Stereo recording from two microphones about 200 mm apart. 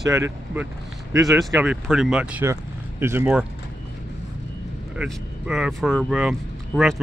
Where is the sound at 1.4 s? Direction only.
5° right (ahead or behind).